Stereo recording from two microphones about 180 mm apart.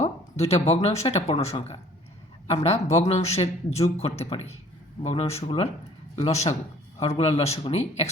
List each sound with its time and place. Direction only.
0.0 s a man's voice: 35° left (ahead or behind)